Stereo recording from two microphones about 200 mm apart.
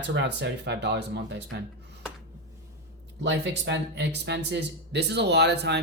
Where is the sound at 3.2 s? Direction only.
60° right (ahead or behind).